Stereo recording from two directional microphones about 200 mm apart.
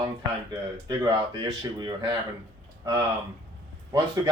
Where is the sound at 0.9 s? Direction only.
20° right (ahead or behind).